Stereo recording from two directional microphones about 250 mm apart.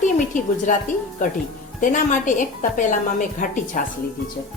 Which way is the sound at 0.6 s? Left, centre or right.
Left.